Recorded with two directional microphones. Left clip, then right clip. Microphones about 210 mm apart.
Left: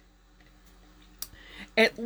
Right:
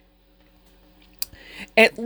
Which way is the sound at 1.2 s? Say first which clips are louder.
Right 8 dB; 40° right (ahead or behind).